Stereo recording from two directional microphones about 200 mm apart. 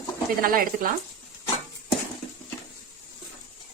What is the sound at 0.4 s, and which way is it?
Speech, 45° right (ahead or behind).